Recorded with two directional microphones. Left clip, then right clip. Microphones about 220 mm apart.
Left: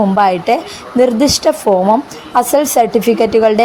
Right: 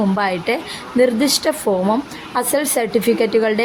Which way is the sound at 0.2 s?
15° left (ahead or behind).